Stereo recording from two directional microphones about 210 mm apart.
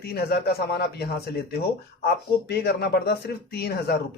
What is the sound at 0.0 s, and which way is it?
A man's voice, 50° left (ahead or behind).